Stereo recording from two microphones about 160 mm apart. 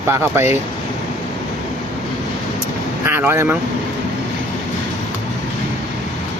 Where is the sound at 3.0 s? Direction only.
15° right (ahead or behind).